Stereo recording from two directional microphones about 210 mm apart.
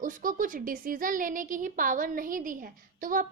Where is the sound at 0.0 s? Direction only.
40° right (ahead or behind).